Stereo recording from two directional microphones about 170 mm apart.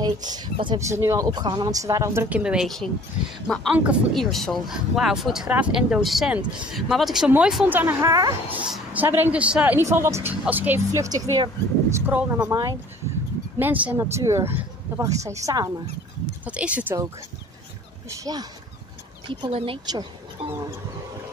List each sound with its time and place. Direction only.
0.0 s speech: 25° right (ahead or behind)
8.5 s speech: 5° right (ahead or behind)
16.4 s speech: 5° right (ahead or behind)
18.2 s speech: 25° right (ahead or behind)